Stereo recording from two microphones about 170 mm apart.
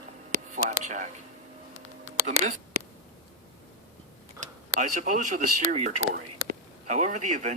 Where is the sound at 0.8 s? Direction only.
45° right (ahead or behind).